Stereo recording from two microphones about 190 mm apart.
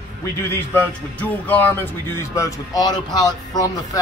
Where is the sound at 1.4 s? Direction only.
10° left (ahead or behind).